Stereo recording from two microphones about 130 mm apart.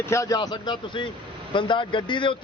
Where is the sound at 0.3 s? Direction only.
40° left (ahead or behind).